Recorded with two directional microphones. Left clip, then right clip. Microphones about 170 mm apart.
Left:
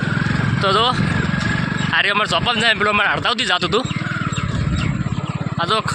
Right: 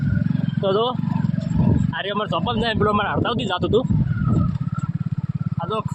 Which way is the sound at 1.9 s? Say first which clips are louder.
Left 10 dB; 15° right (ahead or behind).